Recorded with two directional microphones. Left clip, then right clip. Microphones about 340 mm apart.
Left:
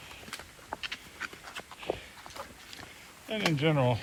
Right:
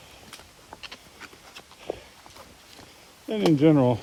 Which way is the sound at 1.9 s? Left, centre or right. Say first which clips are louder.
Right 1 dB; centre.